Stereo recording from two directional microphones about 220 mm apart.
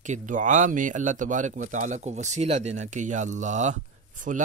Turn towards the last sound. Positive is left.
turn(degrees=-35)  # may be behind; listen again after turning